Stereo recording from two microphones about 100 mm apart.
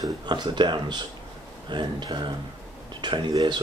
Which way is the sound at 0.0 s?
45° right (ahead or behind).